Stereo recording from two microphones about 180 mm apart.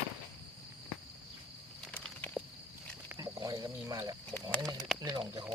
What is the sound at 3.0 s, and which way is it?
Cricket, 15° right (ahead or behind).